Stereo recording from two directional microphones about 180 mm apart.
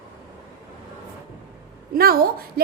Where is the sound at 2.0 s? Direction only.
55° right (ahead or behind).